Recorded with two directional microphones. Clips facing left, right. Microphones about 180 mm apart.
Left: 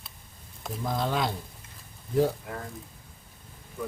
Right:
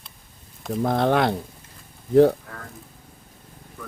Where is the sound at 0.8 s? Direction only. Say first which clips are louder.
Right 8 dB; 60° right (ahead or behind).